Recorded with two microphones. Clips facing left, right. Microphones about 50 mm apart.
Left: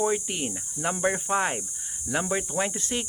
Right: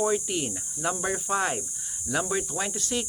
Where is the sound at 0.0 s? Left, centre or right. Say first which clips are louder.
Even; centre.